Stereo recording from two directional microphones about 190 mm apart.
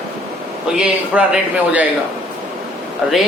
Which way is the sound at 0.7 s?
5° right (ahead or behind).